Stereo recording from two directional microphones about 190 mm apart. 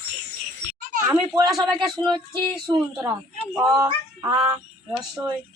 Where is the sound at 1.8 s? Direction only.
25° right (ahead or behind).